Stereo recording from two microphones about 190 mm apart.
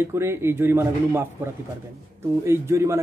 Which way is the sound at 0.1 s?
15° right (ahead or behind).